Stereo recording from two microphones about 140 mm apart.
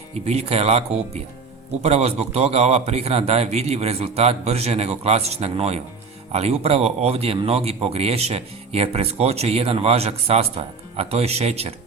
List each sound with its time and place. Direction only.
0.3 s a man's voice: 50° right (ahead or behind)